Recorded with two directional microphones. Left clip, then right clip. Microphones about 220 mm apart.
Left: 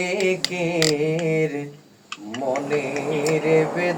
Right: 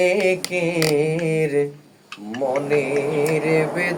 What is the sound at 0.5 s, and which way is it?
Mantra, 50° right (ahead or behind).